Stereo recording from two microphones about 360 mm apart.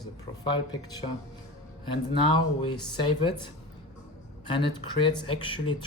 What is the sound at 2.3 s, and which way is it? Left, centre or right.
Speech, centre.